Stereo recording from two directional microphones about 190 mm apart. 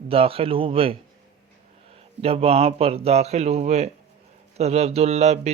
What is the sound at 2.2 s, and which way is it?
A man's voice, 30° right (ahead or behind).